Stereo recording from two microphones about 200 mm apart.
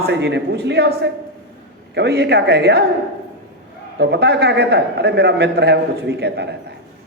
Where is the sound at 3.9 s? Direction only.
55° right (ahead or behind).